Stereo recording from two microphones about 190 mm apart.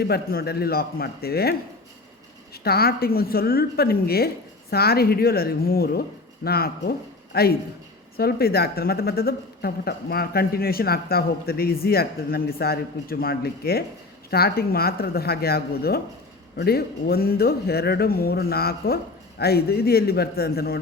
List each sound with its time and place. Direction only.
0.0 s speech: 55° left (ahead or behind)